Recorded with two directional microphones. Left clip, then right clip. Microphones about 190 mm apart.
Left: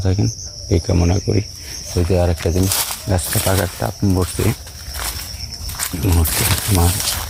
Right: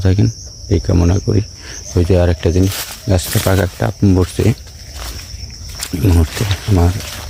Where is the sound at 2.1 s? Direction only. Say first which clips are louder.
Right 3 dB; 50° right (ahead or behind).